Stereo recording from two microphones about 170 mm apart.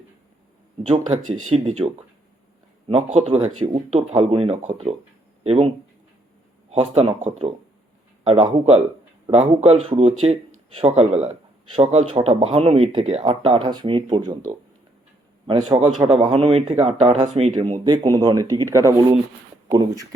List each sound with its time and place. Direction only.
0.8 s speech: 35° right (ahead or behind)
2.9 s a man's voice: 40° right (ahead or behind)
16.0 s speech: 35° right (ahead or behind)
17.8 s speech: 25° right (ahead or behind)